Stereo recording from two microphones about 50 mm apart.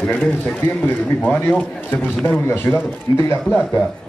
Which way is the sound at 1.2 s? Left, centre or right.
Left.